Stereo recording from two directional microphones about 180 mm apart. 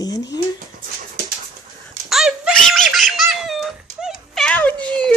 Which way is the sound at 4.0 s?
5° left (ahead or behind).